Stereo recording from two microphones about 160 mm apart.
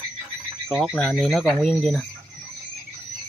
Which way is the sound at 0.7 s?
Centre (ahead or behind).